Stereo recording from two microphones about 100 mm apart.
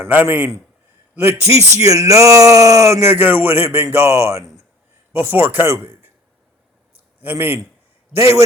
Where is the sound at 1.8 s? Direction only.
35° right (ahead or behind).